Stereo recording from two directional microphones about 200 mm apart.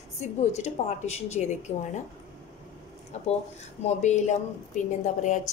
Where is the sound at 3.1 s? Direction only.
35° left (ahead or behind).